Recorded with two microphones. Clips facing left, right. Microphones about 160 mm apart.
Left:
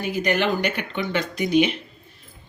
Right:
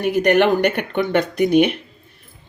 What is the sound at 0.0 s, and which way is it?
Speech, 65° right (ahead or behind).